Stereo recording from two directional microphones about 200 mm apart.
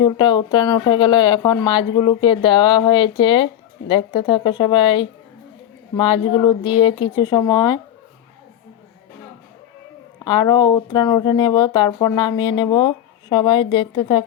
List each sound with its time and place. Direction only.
0.0 s speech: 20° left (ahead or behind)
10.2 s speech: 20° left (ahead or behind)